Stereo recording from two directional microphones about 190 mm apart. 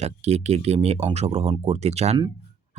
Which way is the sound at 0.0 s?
35° right (ahead or behind).